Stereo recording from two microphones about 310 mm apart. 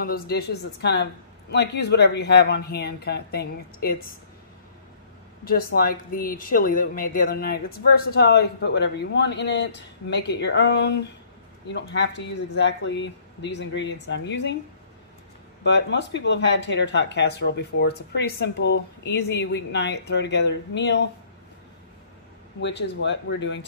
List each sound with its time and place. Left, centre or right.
0.0 s speech: left
5.4 s speech: left
15.6 s speech: left
22.6 s speech: left